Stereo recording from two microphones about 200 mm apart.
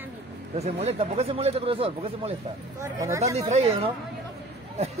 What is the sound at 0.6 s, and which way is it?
Speech, 30° right (ahead or behind).